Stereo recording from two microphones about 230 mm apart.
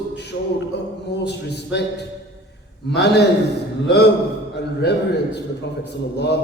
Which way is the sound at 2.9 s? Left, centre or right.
Left.